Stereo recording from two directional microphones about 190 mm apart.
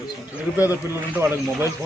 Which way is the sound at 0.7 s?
10° right (ahead or behind).